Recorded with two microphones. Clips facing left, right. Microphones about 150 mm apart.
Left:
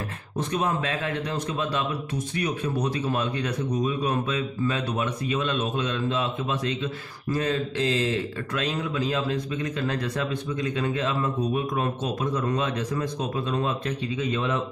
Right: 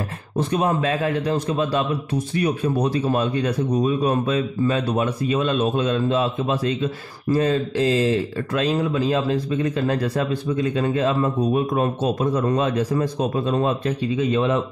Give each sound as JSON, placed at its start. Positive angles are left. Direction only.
{"t": 0.4, "sound": "a man's voice", "side_deg": -35}